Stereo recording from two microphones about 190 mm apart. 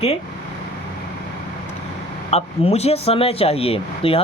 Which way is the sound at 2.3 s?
35° left (ahead or behind).